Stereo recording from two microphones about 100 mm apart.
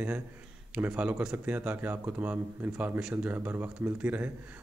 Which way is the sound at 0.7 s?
15° right (ahead or behind).